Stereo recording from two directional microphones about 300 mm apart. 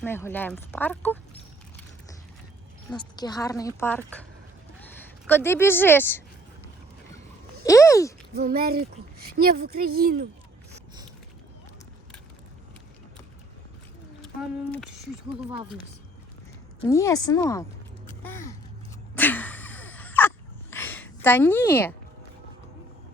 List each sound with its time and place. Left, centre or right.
0.0 s speech: centre
2.9 s speech: centre
5.3 s speech: centre
7.6 s speech: centre
8.3 s speech: right
16.8 s speech: centre
19.1 s a sound: centre